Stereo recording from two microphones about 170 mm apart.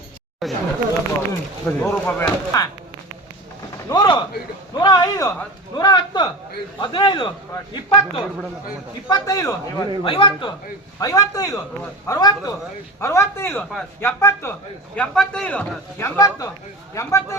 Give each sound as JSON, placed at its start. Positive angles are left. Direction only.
{"t": 0.4, "sound": "speech", "side_deg": 0}
{"t": 1.3, "sound": "a man's voice", "side_deg": 15}
{"t": 3.8, "sound": "a man's voice", "side_deg": 25}
{"t": 13.6, "sound": "a man's voice", "side_deg": 5}
{"t": 14.2, "sound": "a man's voice", "side_deg": 15}